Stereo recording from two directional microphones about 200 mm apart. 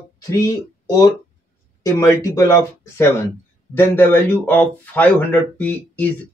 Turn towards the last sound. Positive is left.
turn(degrees=10)  # may be behind; listen again after turning